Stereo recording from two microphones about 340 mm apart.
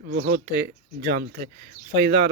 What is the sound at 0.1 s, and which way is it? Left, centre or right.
Speech, right.